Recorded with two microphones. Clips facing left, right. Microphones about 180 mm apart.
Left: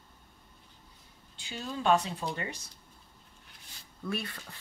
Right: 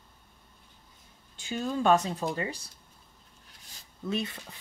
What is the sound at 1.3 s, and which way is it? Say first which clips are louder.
Speech: right 7 dB; 50° right (ahead or behind).